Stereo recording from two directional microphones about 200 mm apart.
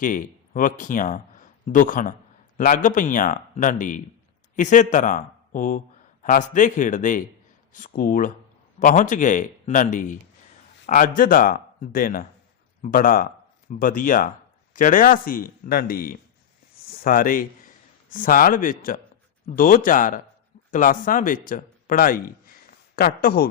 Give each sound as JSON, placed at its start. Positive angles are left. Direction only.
{"t": 0.0, "sound": "a man's voice", "side_deg": 40}